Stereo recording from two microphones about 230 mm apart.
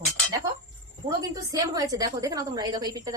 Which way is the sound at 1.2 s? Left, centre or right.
Centre.